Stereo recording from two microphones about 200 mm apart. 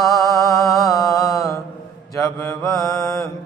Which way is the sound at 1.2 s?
15° left (ahead or behind).